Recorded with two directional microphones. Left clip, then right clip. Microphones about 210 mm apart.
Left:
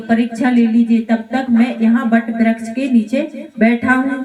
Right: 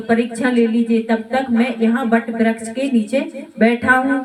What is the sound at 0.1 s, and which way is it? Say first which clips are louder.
A woman's voice: left 1 dB; 50° right (ahead or behind).